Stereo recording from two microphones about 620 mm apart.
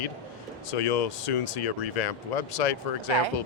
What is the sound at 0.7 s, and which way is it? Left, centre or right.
Speech, left.